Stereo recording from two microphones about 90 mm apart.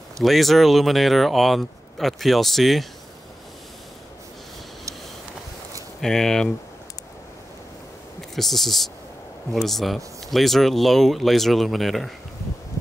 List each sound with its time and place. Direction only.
0.2 s speech: centre (ahead or behind)
5.9 s speech: 5° left (ahead or behind)
8.4 s speech: centre (ahead or behind)